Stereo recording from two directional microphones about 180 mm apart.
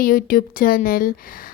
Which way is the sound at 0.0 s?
50° left (ahead or behind).